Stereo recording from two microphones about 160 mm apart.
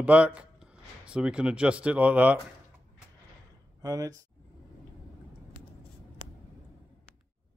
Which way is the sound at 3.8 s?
20° right (ahead or behind).